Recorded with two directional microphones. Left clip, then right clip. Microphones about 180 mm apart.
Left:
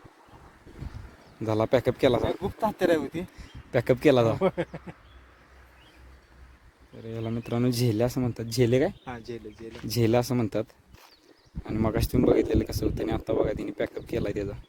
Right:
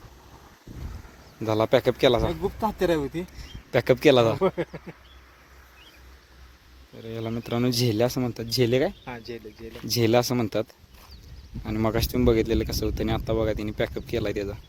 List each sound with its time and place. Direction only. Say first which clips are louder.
1.5 s speech: right 3 dB; 5° left (ahead or behind)
2.6 s speech: left 1 dB; 20° left (ahead or behind)
3.7 s speech: right 3 dB; 5° left (ahead or behind)
4.4 s speech: right 1 dB; 40° left (ahead or behind)
6.9 s speech: right 2 dB; 10° left (ahead or behind)
8.4 s speech: right 1 dB; 20° left (ahead or behind)
9.0 s speech: right 1 dB; 90° left
9.9 s speech: right 3 dB; 10° left (ahead or behind)